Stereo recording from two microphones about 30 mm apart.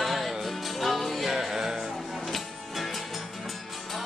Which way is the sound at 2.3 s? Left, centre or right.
Centre.